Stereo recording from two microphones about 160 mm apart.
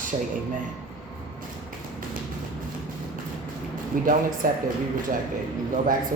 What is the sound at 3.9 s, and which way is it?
Speech, 60° right (ahead or behind).